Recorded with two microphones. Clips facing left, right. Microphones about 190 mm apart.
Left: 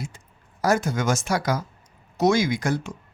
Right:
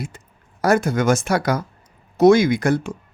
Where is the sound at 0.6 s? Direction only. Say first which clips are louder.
Right 5 dB; 60° right (ahead or behind).